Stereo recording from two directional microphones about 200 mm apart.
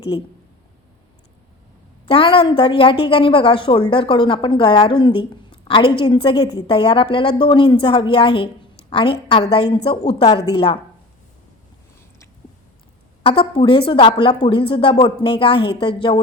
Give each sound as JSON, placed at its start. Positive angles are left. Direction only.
{"t": 0.1, "sound": "a woman's voice", "side_deg": 25}
{"t": 2.0, "sound": "a woman's voice", "side_deg": 25}
{"t": 13.2, "sound": "a woman's voice", "side_deg": 25}